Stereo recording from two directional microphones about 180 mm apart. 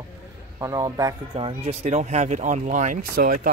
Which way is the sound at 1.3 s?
35° right (ahead or behind).